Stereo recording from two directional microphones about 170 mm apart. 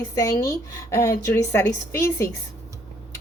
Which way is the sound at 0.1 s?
20° left (ahead or behind).